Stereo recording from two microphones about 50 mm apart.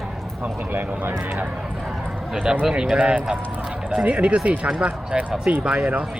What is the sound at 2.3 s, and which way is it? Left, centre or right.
Speech, centre.